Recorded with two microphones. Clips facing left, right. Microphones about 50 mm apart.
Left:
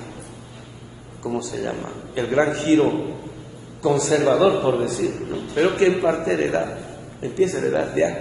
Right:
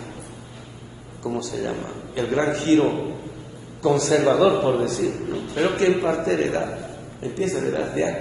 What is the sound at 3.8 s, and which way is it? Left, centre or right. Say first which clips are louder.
A man's voice: even; centre.